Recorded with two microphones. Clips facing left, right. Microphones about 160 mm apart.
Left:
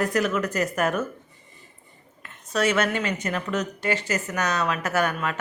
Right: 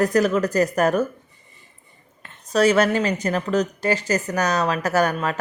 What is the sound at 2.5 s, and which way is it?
A woman's voice, 35° right (ahead or behind).